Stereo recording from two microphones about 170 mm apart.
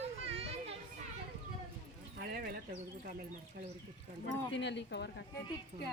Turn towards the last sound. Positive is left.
turn(degrees=90)